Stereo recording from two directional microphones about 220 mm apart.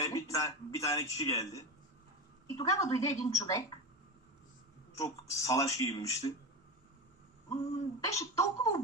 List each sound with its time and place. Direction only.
0.0 s a man's voice: 15° left (ahead or behind)
4.9 s speech: 15° left (ahead or behind)
8.0 s speech: 15° left (ahead or behind)